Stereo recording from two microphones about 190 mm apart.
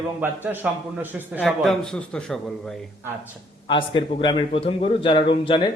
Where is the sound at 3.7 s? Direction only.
25° left (ahead or behind).